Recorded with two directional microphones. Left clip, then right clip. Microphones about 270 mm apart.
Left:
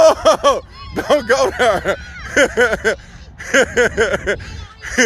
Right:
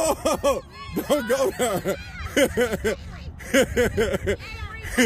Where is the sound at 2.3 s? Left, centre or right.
Centre.